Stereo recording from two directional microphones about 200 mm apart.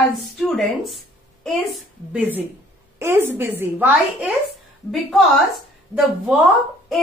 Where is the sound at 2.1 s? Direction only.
10° right (ahead or behind).